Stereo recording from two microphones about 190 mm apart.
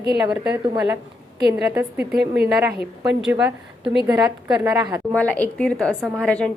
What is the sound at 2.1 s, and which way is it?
Speech, 60° right (ahead or behind).